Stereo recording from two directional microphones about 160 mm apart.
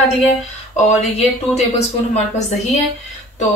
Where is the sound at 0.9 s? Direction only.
45° left (ahead or behind).